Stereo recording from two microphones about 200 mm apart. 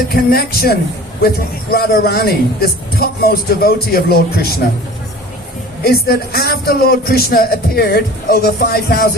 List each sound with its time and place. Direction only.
0.1 s speech: 50° left (ahead or behind)
5.8 s speech: 50° left (ahead or behind)